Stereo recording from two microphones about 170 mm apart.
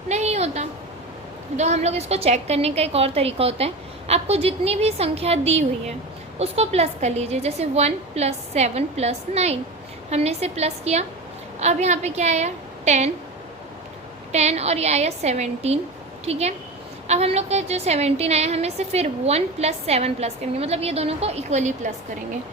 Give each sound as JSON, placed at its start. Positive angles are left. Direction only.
{"t": 0.1, "sound": "a sound", "side_deg": -40}
{"t": 1.5, "sound": "a woman's voice", "side_deg": -40}
{"t": 14.3, "sound": "a woman's voice", "side_deg": -40}